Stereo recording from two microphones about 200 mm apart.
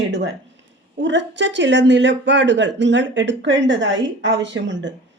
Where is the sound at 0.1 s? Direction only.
65° right (ahead or behind).